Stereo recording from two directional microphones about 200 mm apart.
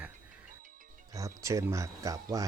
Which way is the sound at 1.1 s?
15° right (ahead or behind).